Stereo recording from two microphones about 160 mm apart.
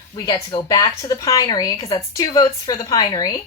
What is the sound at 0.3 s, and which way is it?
A woman's voice, 25° left (ahead or behind).